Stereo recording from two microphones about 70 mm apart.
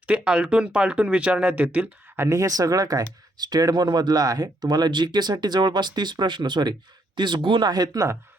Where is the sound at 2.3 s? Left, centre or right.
Right.